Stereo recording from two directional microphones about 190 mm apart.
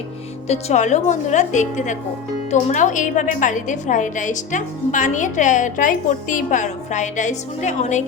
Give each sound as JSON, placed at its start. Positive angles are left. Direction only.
{"t": 0.4, "sound": "a woman's voice", "side_deg": 35}